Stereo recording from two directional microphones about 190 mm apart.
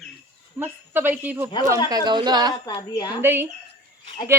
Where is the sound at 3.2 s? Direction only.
10° right (ahead or behind).